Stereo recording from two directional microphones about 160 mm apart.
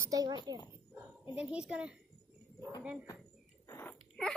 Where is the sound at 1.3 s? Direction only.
5° right (ahead or behind).